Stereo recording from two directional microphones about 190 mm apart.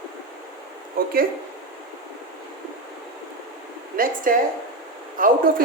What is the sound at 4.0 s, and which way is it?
Speech, 50° right (ahead or behind).